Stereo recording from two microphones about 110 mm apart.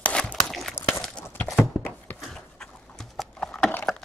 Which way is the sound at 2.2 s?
5° left (ahead or behind).